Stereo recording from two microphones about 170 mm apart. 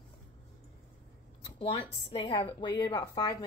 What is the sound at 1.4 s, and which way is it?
A woman's voice, 30° left (ahead or behind).